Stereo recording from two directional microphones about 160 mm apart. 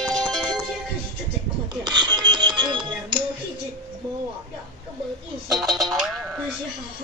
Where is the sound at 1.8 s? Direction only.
30° right (ahead or behind).